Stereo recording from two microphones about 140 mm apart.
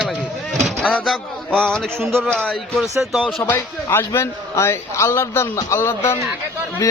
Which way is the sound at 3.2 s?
15° left (ahead or behind).